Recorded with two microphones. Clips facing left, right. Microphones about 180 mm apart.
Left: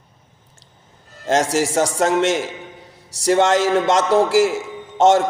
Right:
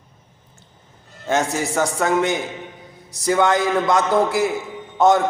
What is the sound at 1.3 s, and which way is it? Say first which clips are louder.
A man's voice: left 3 dB; 90° left.